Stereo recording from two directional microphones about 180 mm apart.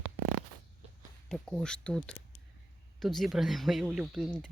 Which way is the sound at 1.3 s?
5° left (ahead or behind).